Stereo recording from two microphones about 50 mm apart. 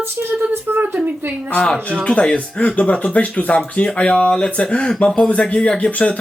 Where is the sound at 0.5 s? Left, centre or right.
Right.